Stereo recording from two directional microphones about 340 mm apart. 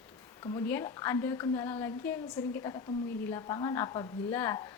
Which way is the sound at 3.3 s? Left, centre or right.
Centre.